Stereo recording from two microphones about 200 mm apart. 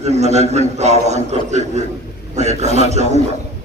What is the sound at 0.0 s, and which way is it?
A man's voice, 35° right (ahead or behind).